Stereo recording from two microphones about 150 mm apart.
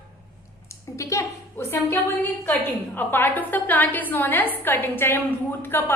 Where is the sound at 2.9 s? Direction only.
15° left (ahead or behind).